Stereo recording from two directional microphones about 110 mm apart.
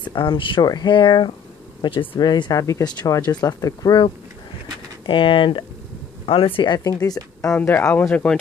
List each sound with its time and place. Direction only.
0.1 s speech: 45° left (ahead or behind)
5.0 s speech: 50° left (ahead or behind); by 7.2 s 35° left (ahead or behind)
7.4 s speech: 20° left (ahead or behind)
8.1 s speech: 10° left (ahead or behind)